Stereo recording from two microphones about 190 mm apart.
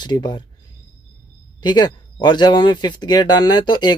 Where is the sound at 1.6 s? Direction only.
20° left (ahead or behind).